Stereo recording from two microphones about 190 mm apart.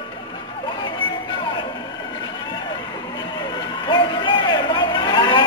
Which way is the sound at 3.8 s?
25° left (ahead or behind).